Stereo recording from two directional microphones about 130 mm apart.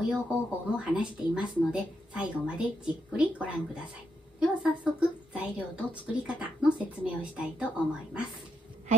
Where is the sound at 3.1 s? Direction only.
10° right (ahead or behind).